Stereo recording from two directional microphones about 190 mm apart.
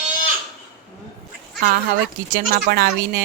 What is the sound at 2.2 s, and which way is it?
Speech, 50° right (ahead or behind).